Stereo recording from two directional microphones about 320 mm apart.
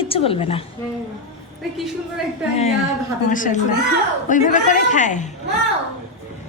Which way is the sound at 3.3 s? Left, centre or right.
Left.